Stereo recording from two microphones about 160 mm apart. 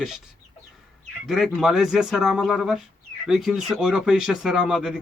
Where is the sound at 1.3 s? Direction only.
Centre (ahead or behind).